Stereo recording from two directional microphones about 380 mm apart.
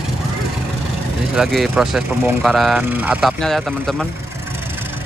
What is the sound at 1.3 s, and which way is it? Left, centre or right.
Speech, centre.